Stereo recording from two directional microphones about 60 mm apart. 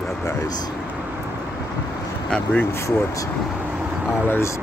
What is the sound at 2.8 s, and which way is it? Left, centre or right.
Speech, left.